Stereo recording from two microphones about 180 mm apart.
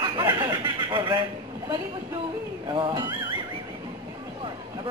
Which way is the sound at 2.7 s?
25° right (ahead or behind).